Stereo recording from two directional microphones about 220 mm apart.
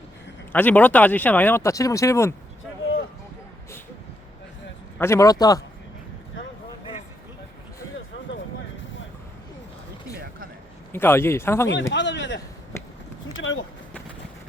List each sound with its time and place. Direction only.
0.5 s speech: 5° left (ahead or behind)
4.9 s speech: 10° left (ahead or behind)
10.9 s speech: 10° left (ahead or behind)
11.7 s speech: 55° left (ahead or behind)
12.7 s a sound: 10° left (ahead or behind)
13.3 s a sound: 60° left (ahead or behind)